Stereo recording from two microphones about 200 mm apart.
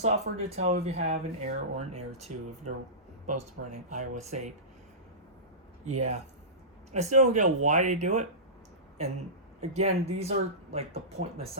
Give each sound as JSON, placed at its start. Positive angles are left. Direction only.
{"t": 0.0, "sound": "speech", "side_deg": -30}
{"t": 3.8, "sound": "speech", "side_deg": -35}
{"t": 5.8, "sound": "speech", "side_deg": -35}
{"t": 9.6, "sound": "speech", "side_deg": -30}